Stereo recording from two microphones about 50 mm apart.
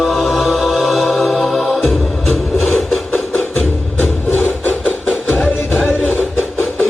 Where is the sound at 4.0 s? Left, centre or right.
Left.